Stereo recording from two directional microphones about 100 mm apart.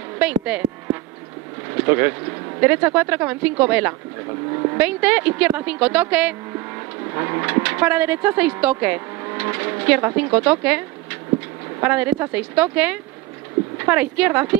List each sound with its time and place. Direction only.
0.2 s speech: 15° right (ahead or behind)
1.9 s speech: 20° right (ahead or behind)
7.2 s speech: 25° right (ahead or behind)